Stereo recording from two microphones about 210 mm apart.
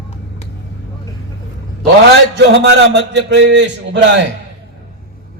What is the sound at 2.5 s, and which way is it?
A man's voice, 55° right (ahead or behind).